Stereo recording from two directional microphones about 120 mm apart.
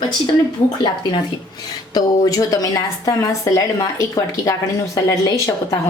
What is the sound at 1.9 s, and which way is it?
A woman's voice, 30° left (ahead or behind).